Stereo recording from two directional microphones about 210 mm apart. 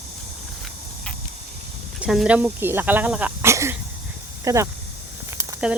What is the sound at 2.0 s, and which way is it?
Speech, 5° right (ahead or behind).